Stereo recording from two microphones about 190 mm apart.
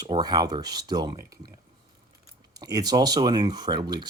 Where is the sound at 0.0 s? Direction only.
20° right (ahead or behind).